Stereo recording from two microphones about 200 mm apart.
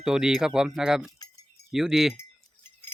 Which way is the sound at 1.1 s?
20° left (ahead or behind).